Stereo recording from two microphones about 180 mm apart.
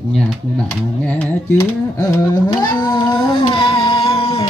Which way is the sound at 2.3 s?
25° left (ahead or behind).